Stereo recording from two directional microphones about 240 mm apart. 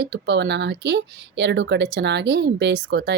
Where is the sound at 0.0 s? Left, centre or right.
Right.